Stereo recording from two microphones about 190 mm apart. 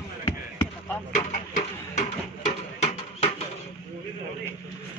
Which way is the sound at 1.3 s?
40° left (ahead or behind).